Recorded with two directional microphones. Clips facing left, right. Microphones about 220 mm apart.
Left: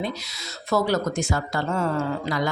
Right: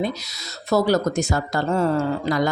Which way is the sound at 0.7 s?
40° right (ahead or behind).